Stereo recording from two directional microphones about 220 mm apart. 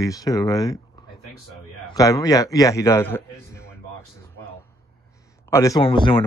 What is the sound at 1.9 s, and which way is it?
A man's voice, 15° left (ahead or behind).